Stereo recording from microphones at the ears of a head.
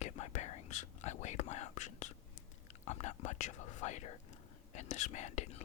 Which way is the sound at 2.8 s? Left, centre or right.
Left.